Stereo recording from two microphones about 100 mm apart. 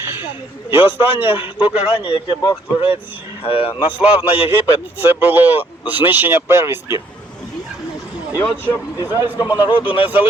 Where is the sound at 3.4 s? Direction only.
65° left (ahead or behind).